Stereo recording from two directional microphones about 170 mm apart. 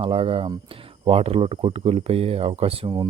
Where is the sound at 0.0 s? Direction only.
35° right (ahead or behind).